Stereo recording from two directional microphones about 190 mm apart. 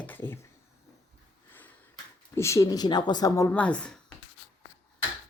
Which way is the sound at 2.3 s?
15° left (ahead or behind).